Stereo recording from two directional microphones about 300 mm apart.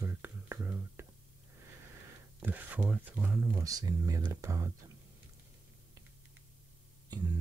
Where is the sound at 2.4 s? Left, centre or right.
Centre.